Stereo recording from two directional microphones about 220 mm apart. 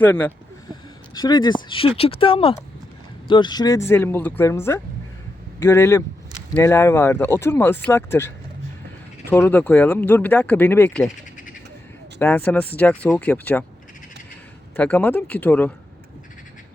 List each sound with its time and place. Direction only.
0.0 s speech: 10° left (ahead or behind)
1.1 s speech: 20° left (ahead or behind)
9.3 s speech: 10° left (ahead or behind)
12.2 s speech: 10° left (ahead or behind)
14.8 s speech: 5° left (ahead or behind)